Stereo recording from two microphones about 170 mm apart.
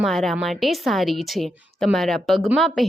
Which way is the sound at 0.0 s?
Centre (ahead or behind).